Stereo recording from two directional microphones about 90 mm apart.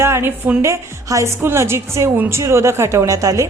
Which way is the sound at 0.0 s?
25° right (ahead or behind).